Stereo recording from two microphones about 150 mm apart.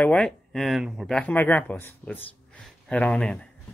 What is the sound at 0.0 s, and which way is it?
Speech, 5° left (ahead or behind).